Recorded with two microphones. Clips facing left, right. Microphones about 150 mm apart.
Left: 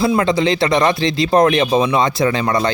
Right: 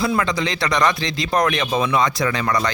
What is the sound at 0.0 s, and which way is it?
Speech, 25° left (ahead or behind).